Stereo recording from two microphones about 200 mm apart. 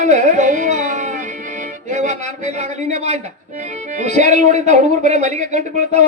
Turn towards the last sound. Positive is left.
turn(degrees=-35)  # may be behind; listen again after turning